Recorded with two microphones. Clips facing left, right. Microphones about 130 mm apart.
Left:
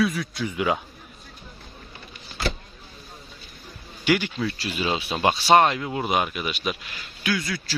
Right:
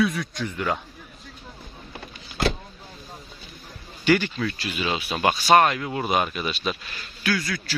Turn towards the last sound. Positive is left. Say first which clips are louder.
# right 1 dB
turn(degrees=20)  # may be behind; listen again after turning